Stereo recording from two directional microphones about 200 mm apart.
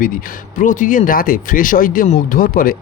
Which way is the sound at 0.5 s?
40° left (ahead or behind).